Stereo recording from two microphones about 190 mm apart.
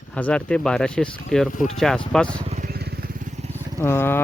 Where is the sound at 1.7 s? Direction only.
Centre (ahead or behind).